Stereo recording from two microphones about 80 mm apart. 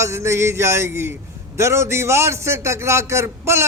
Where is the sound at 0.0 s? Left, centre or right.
Right.